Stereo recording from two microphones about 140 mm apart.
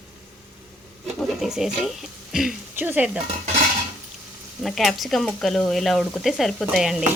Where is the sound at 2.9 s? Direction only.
10° right (ahead or behind).